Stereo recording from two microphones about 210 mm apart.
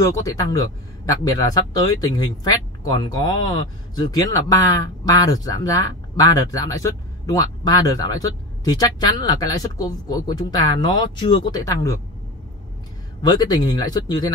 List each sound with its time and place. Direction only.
0.0 s speech: 15° left (ahead or behind)
13.2 s speech: 20° left (ahead or behind)